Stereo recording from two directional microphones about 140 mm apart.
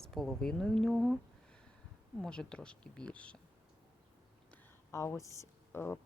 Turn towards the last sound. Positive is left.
turn(degrees=15)  # may be behind; listen again after turning